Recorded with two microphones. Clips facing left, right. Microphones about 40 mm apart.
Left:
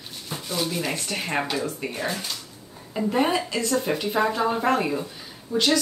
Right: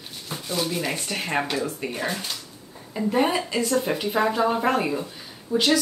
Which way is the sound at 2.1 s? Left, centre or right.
Centre.